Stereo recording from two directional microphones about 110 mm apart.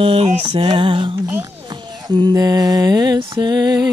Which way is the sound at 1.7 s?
40° right (ahead or behind).